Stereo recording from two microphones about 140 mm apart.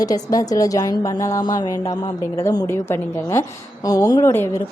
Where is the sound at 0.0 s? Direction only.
25° left (ahead or behind).